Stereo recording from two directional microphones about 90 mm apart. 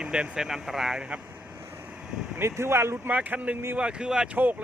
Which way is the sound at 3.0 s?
15° right (ahead or behind).